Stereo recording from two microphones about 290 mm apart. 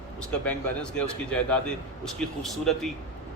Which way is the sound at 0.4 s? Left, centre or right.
Centre.